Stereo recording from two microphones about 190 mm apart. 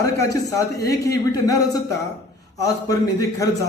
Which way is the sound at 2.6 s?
20° left (ahead or behind).